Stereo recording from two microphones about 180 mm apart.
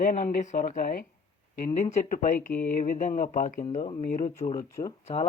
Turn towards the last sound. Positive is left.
turn(degrees=40)  # may be behind; listen again after turning